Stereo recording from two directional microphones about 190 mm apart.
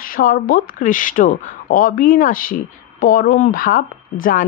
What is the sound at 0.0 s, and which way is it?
Speech, 50° left (ahead or behind).